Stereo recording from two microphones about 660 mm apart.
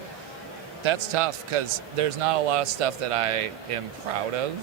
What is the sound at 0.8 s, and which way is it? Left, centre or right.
A man's voice, right.